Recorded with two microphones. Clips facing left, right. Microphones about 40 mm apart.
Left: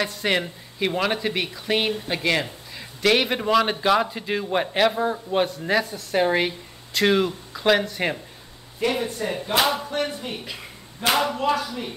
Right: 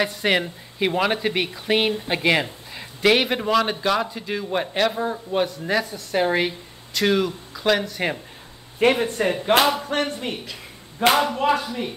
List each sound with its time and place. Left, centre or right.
0.0 s a man's voice: centre
8.7 s speech: right
11.3 s speech: right